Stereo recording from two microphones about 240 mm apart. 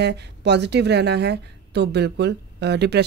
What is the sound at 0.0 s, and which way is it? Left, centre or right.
A woman's voice, right.